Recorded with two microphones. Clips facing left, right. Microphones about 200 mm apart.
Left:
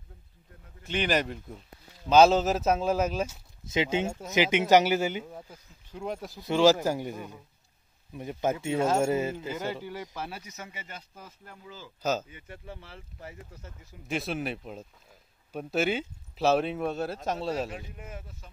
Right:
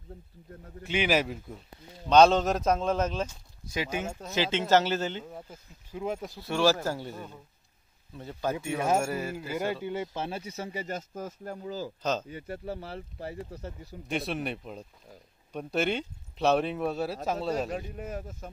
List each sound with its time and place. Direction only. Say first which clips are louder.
0.8 s speech: right 1 dB; 5° right (ahead or behind); by 3.3 s 10° left (ahead or behind)
3.6 s speech: left 5 dB; 20° left (ahead or behind)
5.3 s speech: right 1 dB; 5° right (ahead or behind)
6.4 s speech: left 4 dB; 15° left (ahead or behind)
9.5 s speech: right 2 dB; 15° right (ahead or behind)
10.1 s speech: right 4 dB; 25° right (ahead or behind)
12.0 s speech: left 3 dB; 5° left (ahead or behind)
12.3 s speech: right 8 dB; 40° right (ahead or behind)
14.0 s speech: even; centre (ahead or behind)
17.6 s speech: right 6 dB; 40° right (ahead or behind)